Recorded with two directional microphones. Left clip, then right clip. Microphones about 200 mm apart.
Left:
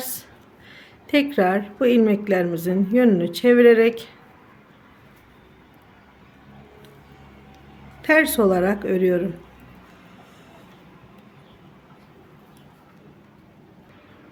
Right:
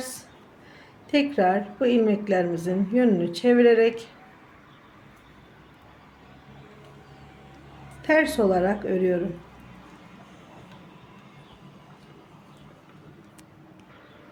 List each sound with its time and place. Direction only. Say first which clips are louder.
0.7 s a woman's voice: left 4 dB; 20° left (ahead or behind)
8.0 s a woman's voice: left 4 dB; 25° left (ahead or behind)